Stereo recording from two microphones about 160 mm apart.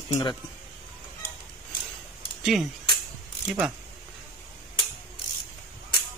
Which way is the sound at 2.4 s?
Centre (ahead or behind).